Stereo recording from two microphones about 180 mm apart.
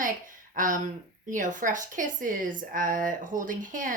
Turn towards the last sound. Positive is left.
turn(degrees=-45)  # may be behind; listen again after turning